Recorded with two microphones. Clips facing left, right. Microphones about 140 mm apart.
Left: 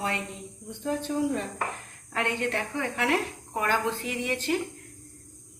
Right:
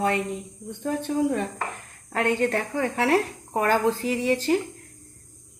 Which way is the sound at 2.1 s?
40° right (ahead or behind).